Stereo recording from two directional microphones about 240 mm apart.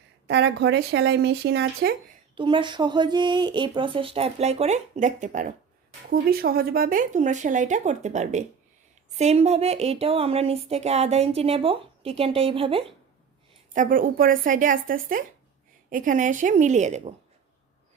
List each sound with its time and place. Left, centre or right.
0.3 s speech: right
2.3 s speech: right
13.7 s speech: right